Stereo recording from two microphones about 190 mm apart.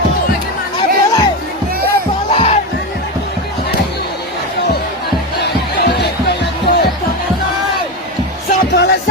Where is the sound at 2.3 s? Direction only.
35° left (ahead or behind).